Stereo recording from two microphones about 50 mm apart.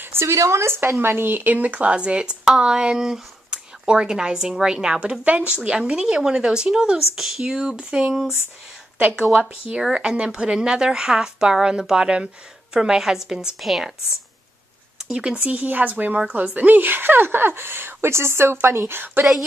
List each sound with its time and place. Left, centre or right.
0.0 s a sound: right
0.4 s speech: right
0.9 s speech: right; by 5.2 s centre
5.2 s a woman's voice: right; by 7.4 s centre
7.4 s speech: centre
9.4 s a woman's voice: right; by 13.9 s centre
15.0 s speech: centre
15.3 s a woman's voice: right
19.2 s a woman's voice: right